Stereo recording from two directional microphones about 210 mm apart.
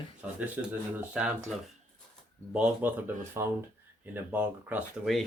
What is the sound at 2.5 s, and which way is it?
Speech, 5° right (ahead or behind).